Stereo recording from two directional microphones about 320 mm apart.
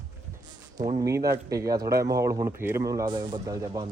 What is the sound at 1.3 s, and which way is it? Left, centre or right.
Speech, centre.